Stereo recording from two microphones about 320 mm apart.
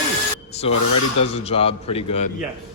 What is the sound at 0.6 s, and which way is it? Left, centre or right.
A man's voice, centre.